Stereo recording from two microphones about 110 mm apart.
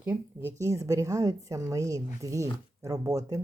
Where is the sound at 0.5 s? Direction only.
30° right (ahead or behind).